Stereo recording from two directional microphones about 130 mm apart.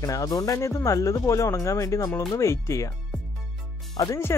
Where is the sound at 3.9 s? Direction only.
25° left (ahead or behind).